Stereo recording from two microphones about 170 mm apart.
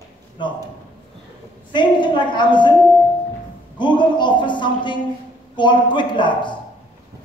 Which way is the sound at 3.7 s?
25° left (ahead or behind).